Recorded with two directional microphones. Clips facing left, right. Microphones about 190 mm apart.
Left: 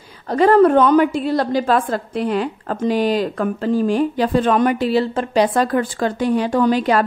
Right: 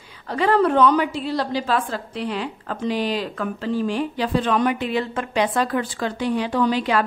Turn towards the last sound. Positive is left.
turn(degrees=45)  # may be behind; listen again after turning